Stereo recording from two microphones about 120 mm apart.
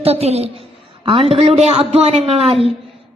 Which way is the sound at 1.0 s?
50° right (ahead or behind).